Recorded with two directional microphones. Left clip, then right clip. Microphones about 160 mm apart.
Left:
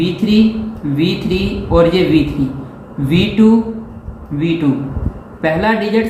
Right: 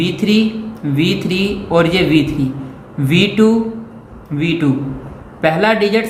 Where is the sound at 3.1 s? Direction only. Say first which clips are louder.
Right 1 dB; 90° right.